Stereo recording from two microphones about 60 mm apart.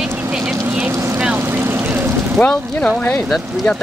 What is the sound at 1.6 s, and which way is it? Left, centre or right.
Vehicle, right.